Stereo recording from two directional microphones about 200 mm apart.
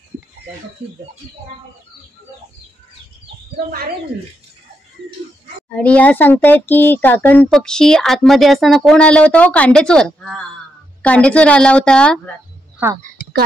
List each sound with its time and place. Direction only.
5.8 s speech: 5° left (ahead or behind)
12.8 s speech: 15° right (ahead or behind)